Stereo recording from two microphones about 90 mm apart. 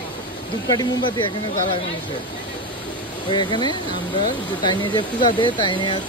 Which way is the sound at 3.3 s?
60° left (ahead or behind).